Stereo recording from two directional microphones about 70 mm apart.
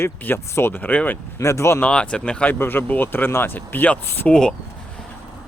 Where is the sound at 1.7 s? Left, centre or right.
Centre.